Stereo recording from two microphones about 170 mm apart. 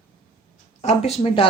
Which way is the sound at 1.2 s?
35° left (ahead or behind).